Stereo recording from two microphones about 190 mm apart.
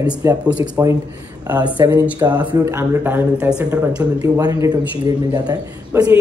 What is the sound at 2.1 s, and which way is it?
Speech, 20° right (ahead or behind).